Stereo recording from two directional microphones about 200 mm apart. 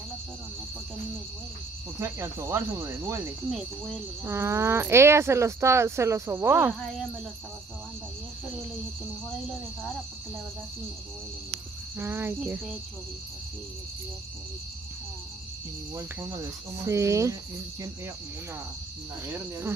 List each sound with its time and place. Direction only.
2.0 s speech: 10° right (ahead or behind)
4.2 s speech: 10° right (ahead or behind)
12.0 s speech: 10° right (ahead or behind)
15.9 s speech: 15° right (ahead or behind)